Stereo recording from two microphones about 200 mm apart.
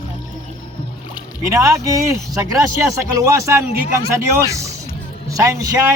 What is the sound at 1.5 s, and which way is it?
Speech, 15° right (ahead or behind).